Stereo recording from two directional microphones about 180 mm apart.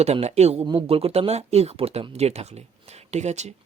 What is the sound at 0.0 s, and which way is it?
A man's voice, 35° right (ahead or behind).